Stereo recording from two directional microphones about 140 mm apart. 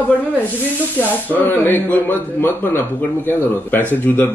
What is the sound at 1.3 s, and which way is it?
A man's voice, 15° left (ahead or behind).